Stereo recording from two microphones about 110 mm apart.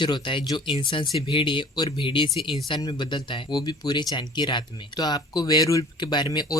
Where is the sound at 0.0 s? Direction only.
45° left (ahead or behind).